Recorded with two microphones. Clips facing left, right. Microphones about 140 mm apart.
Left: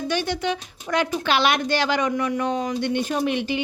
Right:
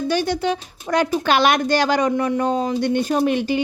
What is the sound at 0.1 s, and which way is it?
A woman's voice, 40° right (ahead or behind).